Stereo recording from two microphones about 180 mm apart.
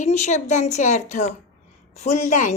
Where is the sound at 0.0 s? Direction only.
40° left (ahead or behind).